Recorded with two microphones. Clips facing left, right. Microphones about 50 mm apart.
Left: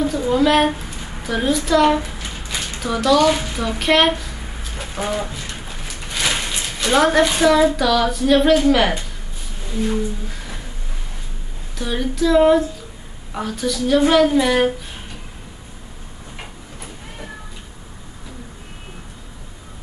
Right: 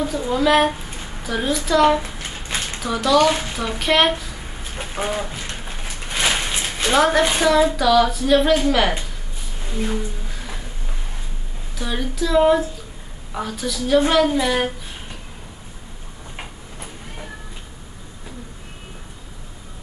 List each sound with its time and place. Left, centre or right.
0.0 s a woman's voice: centre
2.1 s a sound: right
2.8 s a child's voice: centre
4.8 s bird: right
5.7 s a sound: centre
6.9 s speech: centre
11.7 s speech: centre